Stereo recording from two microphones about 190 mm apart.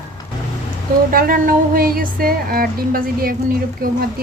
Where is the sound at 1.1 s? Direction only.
50° right (ahead or behind).